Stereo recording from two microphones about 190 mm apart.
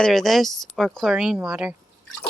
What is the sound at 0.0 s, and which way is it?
Speech, centre (ahead or behind).